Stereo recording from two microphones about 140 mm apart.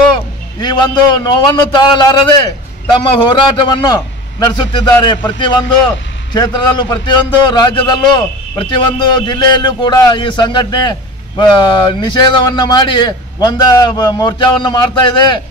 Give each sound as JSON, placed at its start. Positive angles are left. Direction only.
{"t": 0.6, "sound": "a man's voice", "side_deg": 30}